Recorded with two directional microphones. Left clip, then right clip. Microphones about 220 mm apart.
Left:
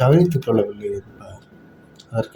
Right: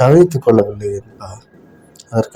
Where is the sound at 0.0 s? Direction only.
25° right (ahead or behind).